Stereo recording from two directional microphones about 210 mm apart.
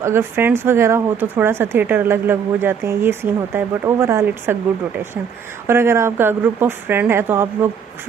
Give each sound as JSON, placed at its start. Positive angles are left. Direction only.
{"t": 0.0, "sound": "speech", "side_deg": -10}
{"t": 5.6, "sound": "speech", "side_deg": -10}